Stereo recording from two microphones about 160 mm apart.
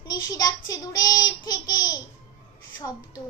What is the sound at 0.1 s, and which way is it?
Child singing, 25° left (ahead or behind).